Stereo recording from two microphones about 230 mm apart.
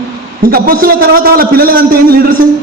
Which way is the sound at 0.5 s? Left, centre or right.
Right.